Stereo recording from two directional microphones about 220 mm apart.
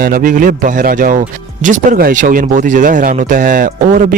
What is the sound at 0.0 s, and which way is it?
Speech, 40° right (ahead or behind).